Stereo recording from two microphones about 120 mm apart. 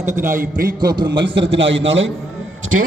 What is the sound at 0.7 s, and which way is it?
A man's voice, 40° right (ahead or behind).